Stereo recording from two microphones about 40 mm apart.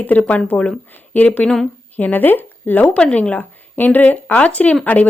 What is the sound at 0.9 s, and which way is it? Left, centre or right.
Speech, left.